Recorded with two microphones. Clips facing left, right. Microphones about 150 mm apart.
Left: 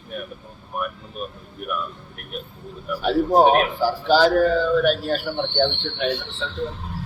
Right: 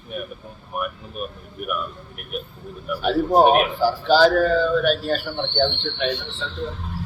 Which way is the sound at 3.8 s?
10° left (ahead or behind).